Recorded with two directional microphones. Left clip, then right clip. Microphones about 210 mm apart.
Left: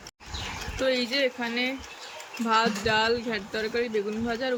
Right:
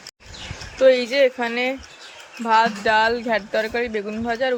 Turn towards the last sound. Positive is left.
turn(degrees=-10)  # may be behind; listen again after turning